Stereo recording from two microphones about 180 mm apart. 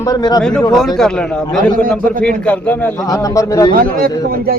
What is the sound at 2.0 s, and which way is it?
Speech, 50° right (ahead or behind).